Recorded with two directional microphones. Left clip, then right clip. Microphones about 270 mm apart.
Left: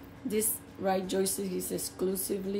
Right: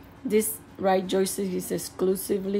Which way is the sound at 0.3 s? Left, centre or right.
Right.